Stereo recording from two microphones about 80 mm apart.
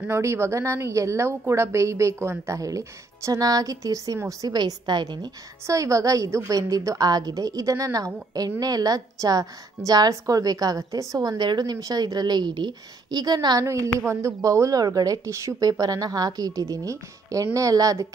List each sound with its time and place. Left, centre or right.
0.2 s a woman's voice: right
4.6 s speech: right
5.7 s a woman's voice: right
11.2 s speech: right
13.6 s a woman's voice: right
15.8 s a woman's voice: right